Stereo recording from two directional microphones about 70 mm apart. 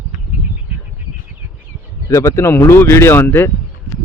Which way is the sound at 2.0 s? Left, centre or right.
Left.